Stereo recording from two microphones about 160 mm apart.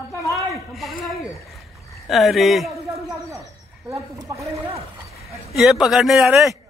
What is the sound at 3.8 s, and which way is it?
Speech, 20° right (ahead or behind).